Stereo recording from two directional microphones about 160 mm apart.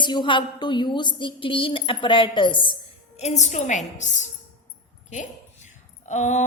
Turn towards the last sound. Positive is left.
turn(degrees=50)  # may be behind; listen again after turning